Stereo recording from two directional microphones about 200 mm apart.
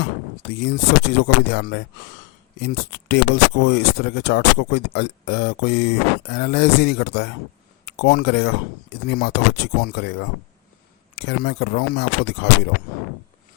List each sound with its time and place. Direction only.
0.0 s speech: 55° left (ahead or behind)